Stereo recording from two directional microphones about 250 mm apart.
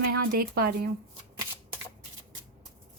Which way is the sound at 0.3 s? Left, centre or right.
Right.